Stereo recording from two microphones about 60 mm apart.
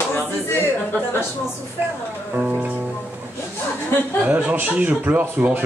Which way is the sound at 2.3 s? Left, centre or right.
Right.